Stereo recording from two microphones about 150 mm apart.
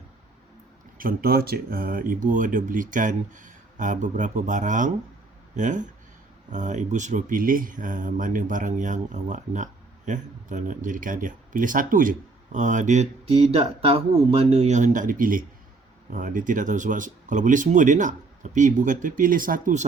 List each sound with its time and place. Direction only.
0.9 s speech: 75° right (ahead or behind)